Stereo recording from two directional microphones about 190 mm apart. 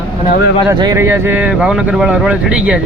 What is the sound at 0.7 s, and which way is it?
Speech, 20° right (ahead or behind).